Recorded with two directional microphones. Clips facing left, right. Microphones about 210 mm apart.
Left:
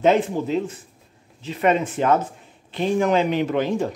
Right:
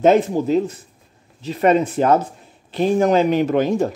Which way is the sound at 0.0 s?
40° right (ahead or behind).